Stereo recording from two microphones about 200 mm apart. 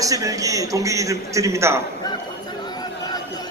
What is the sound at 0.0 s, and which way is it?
A man's voice, 15° right (ahead or behind).